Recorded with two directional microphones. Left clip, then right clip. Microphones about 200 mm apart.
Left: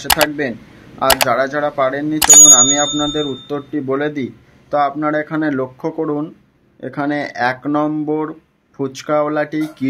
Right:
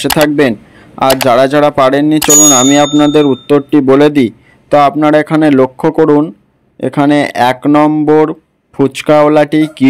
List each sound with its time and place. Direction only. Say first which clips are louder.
0.4 s a sound: right 11 dB; 40° right (ahead or behind)
1.0 s speech: right 5 dB; centre (ahead or behind)
1.3 s speech: right 9 dB; 40° right (ahead or behind)